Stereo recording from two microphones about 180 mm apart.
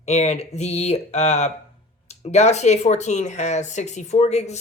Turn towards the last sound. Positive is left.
turn(degrees=40)  # may be behind; listen again after turning